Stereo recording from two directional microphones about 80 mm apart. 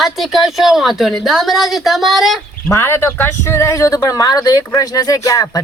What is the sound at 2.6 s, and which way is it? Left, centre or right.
Speech, left.